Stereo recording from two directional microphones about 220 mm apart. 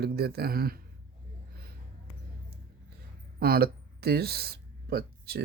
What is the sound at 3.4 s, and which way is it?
Speech, 45° right (ahead or behind).